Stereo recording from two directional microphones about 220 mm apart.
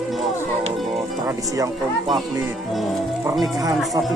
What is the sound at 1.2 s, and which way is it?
Speech, 15° right (ahead or behind).